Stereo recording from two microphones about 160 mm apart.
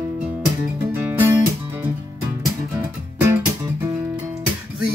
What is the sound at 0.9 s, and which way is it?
Music, 15° right (ahead or behind).